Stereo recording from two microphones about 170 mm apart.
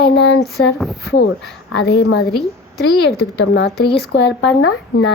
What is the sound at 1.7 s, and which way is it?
Speech, 90° left.